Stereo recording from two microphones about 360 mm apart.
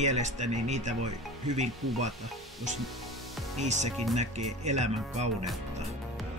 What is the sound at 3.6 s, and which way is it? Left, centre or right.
Speech, centre.